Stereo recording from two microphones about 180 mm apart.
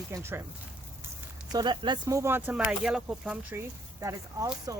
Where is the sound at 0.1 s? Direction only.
15° right (ahead or behind).